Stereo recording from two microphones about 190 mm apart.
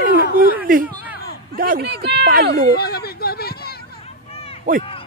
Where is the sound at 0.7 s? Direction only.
45° right (ahead or behind).